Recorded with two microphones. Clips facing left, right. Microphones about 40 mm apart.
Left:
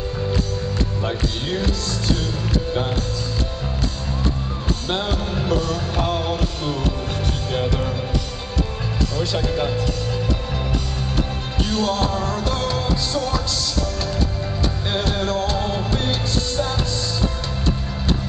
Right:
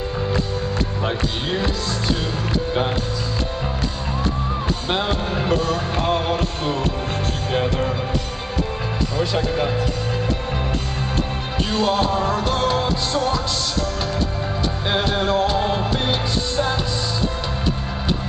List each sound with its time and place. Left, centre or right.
1.0 s speech: centre
4.8 s music: centre
9.1 s speech: centre
11.7 s music: centre
14.9 s music: right